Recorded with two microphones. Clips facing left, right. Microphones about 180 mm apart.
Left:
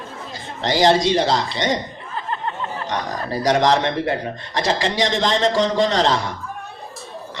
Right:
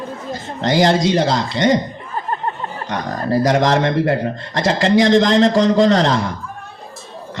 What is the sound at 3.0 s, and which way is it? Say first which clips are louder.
Speech: right 9 dB; 50° right (ahead or behind).